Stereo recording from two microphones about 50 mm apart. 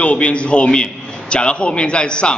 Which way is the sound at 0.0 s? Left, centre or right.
Left.